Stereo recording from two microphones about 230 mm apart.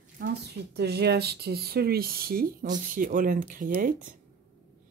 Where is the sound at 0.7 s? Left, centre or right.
Right.